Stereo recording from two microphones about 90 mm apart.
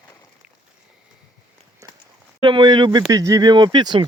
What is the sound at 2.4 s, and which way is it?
Speech, 65° right (ahead or behind).